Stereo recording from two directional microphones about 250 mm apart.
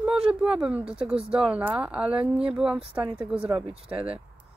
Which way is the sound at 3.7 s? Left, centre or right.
Right.